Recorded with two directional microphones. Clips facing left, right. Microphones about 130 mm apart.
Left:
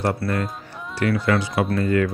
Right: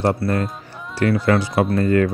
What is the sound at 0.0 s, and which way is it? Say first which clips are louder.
Speech: right 4 dB; 35° right (ahead or behind).